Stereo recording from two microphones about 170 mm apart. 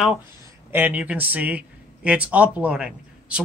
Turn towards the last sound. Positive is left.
turn(degrees=-5)  # may be behind; listen again after turning